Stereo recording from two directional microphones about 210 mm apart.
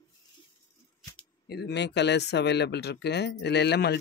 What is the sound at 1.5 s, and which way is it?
Speech, 50° left (ahead or behind).